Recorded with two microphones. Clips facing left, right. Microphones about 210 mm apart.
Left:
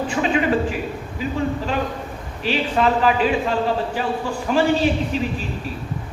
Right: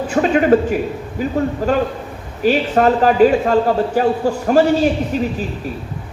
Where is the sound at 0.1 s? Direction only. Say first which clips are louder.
Right 8 dB; 45° right (ahead or behind).